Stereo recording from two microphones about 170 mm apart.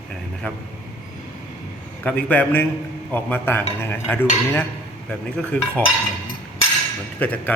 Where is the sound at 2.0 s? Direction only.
10° left (ahead or behind).